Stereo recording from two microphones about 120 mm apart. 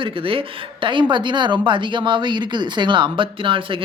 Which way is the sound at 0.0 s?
45° right (ahead or behind).